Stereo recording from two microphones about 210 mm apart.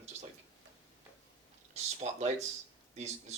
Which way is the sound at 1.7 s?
35° right (ahead or behind).